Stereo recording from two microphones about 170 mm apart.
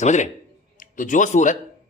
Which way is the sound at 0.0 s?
45° left (ahead or behind).